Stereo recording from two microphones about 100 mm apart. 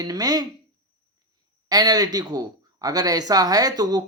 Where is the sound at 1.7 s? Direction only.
40° right (ahead or behind).